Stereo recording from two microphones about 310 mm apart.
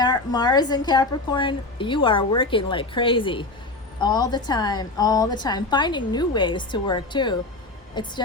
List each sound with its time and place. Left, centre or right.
0.0 s a woman's voice: centre